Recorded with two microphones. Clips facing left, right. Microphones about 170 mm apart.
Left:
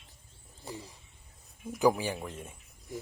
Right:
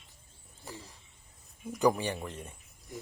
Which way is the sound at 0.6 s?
10° left (ahead or behind).